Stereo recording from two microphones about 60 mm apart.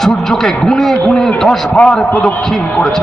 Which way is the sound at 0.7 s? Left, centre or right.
Centre.